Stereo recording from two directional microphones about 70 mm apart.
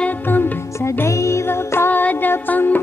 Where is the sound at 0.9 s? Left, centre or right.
Left.